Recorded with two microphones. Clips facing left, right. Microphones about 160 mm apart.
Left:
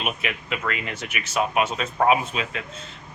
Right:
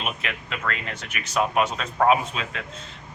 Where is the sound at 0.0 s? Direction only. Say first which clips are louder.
Left 2 dB; 10° left (ahead or behind).